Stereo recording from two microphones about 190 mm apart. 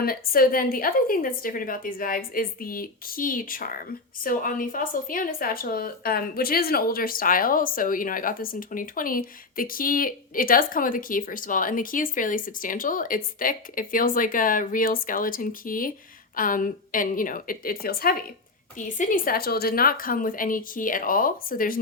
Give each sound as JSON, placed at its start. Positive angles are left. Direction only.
{"t": 0.0, "sound": "a woman's voice", "side_deg": 50}